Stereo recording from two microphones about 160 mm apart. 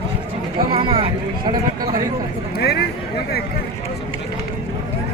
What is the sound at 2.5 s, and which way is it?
Speech, 90° left.